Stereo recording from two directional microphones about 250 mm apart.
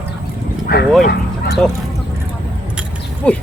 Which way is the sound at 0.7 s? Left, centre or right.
Left.